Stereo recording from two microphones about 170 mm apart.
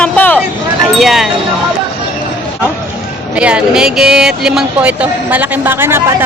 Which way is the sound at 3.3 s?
5° right (ahead or behind).